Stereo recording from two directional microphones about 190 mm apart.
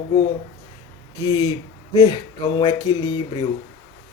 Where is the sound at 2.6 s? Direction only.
20° left (ahead or behind).